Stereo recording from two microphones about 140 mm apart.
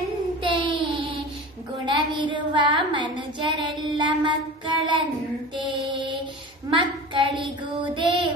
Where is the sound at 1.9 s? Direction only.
35° right (ahead or behind).